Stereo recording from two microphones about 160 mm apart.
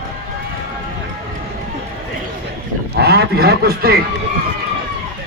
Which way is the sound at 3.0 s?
90° right.